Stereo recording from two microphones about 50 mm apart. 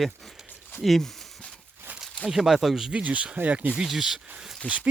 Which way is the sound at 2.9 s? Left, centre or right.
Right.